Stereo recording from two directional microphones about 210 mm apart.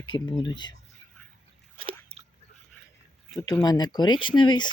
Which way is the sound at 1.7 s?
25° right (ahead or behind).